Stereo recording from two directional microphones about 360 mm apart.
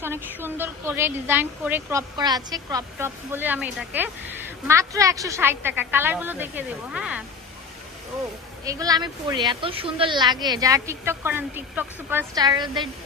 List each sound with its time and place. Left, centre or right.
0.0 s a woman's voice: centre
8.6 s speech: centre